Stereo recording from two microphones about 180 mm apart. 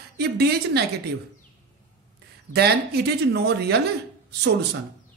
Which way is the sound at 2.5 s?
65° right (ahead or behind).